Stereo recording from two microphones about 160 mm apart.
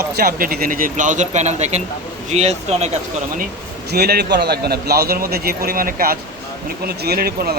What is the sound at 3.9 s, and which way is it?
A man's voice, 75° right (ahead or behind).